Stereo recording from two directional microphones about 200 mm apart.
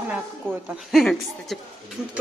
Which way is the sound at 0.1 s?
5° right (ahead or behind).